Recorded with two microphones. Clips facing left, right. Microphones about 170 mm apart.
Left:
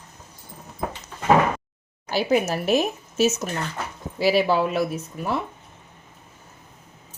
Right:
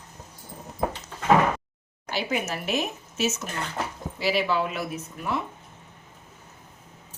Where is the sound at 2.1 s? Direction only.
35° left (ahead or behind).